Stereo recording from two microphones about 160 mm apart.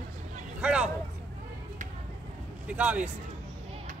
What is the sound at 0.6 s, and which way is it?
Speech, 5° right (ahead or behind).